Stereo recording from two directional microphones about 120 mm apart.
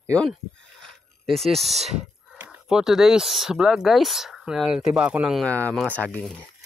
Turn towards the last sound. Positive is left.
turn(degrees=15)  # may be behind; listen again after turning